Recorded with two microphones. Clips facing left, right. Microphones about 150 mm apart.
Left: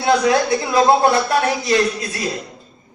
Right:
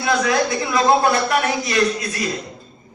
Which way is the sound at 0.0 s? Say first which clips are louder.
Left 3 dB; 30° left (ahead or behind).